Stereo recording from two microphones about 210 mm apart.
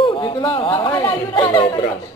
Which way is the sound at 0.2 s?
25° left (ahead or behind).